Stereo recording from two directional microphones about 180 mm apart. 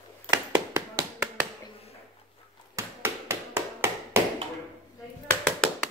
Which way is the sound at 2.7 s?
15° right (ahead or behind).